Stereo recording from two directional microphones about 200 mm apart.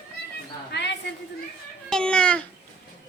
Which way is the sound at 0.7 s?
60° left (ahead or behind).